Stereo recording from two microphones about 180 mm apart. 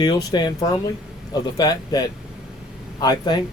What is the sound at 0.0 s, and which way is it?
Speech, 20° left (ahead or behind).